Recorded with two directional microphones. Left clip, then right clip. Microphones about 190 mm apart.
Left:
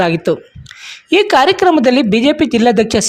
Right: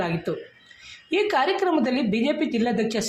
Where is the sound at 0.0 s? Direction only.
50° left (ahead or behind).